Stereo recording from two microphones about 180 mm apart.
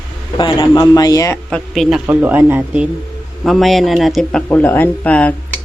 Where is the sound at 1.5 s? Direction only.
Centre (ahead or behind).